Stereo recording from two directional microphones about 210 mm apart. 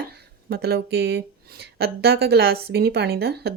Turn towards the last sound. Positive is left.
turn(degrees=-50)  # may be behind; listen again after turning